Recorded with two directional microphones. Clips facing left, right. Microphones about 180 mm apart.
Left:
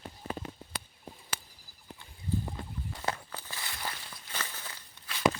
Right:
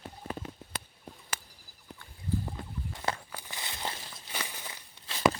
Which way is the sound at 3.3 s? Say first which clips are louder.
Even; 20° right (ahead or behind).